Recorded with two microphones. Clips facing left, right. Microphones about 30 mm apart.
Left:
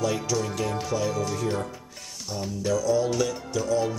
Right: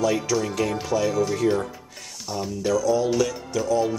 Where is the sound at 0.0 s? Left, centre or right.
Centre.